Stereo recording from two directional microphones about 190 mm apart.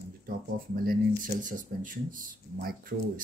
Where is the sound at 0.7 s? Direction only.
50° right (ahead or behind).